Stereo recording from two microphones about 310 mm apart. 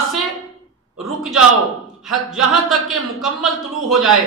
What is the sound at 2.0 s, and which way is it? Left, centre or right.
Speech, centre.